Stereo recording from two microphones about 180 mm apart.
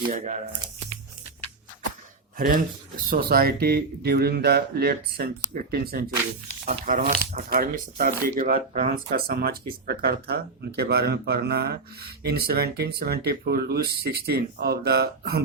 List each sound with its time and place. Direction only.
2.4 s speech: 50° right (ahead or behind)
6.7 s speech: 45° right (ahead or behind)
7.5 s speech: 55° right (ahead or behind)
8.5 s speech: 35° right (ahead or behind)
9.1 s speech: 55° right (ahead or behind)